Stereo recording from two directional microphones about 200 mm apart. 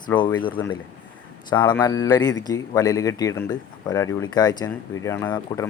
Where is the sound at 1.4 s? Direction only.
20° left (ahead or behind).